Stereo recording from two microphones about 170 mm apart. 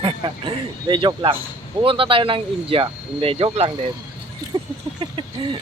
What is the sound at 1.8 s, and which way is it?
Speech, 30° right (ahead or behind).